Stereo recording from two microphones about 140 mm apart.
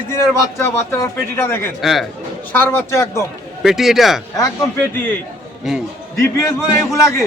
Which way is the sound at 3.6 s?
Centre (ahead or behind).